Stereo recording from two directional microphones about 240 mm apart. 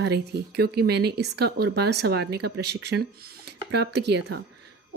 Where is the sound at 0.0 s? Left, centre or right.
Right.